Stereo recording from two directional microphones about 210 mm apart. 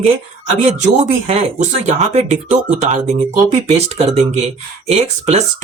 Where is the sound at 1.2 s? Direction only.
30° right (ahead or behind).